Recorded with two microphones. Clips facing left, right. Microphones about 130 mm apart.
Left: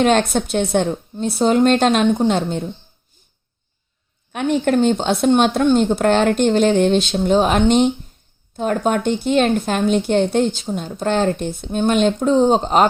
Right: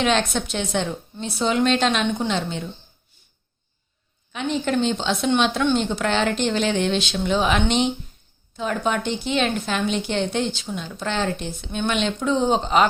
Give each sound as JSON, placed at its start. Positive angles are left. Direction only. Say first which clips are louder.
{"t": 0.0, "sound": "a woman's voice", "louder": "left 6 dB", "side_deg": 45}
{"t": 4.3, "sound": "a woman's voice", "louder": "left 6 dB", "side_deg": 55}